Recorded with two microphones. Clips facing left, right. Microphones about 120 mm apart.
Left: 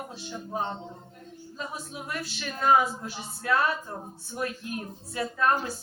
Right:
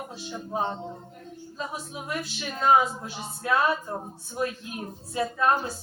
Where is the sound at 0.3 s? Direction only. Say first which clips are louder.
Right 3 dB; 15° right (ahead or behind).